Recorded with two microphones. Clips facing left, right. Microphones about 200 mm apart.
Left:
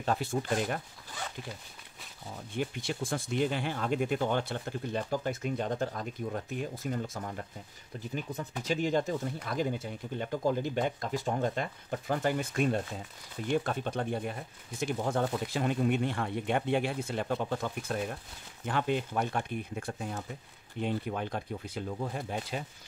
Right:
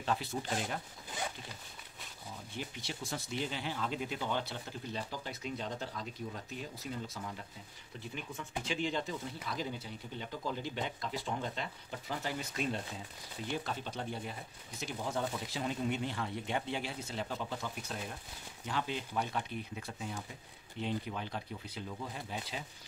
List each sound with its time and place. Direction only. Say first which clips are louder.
0.0 s speech: left 5 dB; 50° left (ahead or behind)
2.5 s speech: left 10 dB; 55° left (ahead or behind)
8.1 s speech: left 5 dB; 40° left (ahead or behind)